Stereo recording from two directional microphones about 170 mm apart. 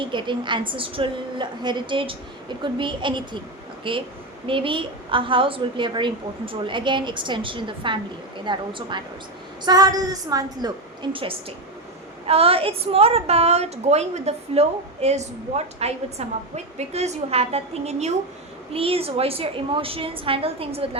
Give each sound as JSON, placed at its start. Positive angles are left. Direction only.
{"t": 0.0, "sound": "a woman's voice", "side_deg": -30}
{"t": 9.6, "sound": "a woman's voice", "side_deg": -20}